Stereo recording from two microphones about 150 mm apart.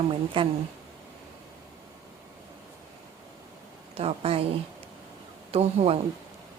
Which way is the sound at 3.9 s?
40° right (ahead or behind).